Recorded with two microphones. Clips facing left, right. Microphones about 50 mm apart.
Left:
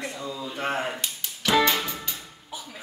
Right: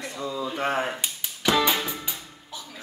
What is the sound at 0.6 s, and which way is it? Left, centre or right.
Cap gun, centre.